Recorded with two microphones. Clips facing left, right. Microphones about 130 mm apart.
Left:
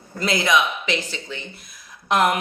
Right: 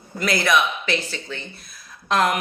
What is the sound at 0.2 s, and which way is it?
A woman's voice, 20° left (ahead or behind).